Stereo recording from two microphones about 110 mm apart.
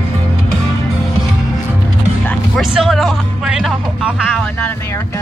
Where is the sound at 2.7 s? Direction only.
Centre (ahead or behind).